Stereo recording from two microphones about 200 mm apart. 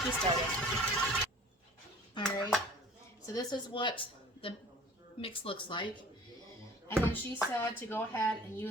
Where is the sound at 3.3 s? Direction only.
25° left (ahead or behind).